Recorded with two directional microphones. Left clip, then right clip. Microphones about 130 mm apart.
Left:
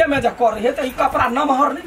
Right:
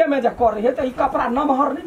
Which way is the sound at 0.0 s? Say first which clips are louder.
Left 1 dB; 5° left (ahead or behind).